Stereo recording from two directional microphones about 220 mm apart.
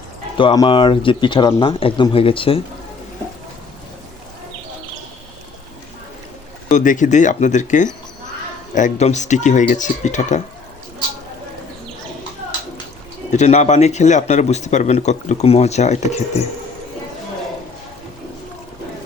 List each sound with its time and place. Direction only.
0.3 s speech: 20° left (ahead or behind)
6.7 s speech: 35° left (ahead or behind)
13.3 s speech: 30° left (ahead or behind)